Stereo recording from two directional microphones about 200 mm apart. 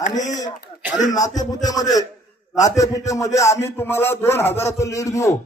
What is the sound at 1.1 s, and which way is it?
Speech, 20° left (ahead or behind).